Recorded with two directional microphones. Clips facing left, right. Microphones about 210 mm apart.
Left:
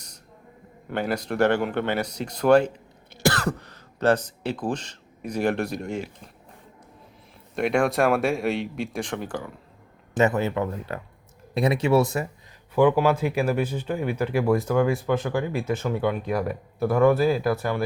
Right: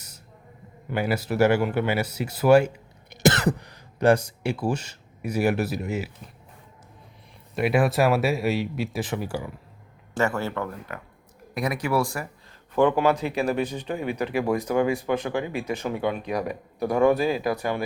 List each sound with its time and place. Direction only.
0.9 s speech: 5° right (ahead or behind)
7.5 s speech: 5° right (ahead or behind)
10.2 s speech: 20° left (ahead or behind)
12.7 s speech: 10° left (ahead or behind)
13.8 s speech: 15° right (ahead or behind)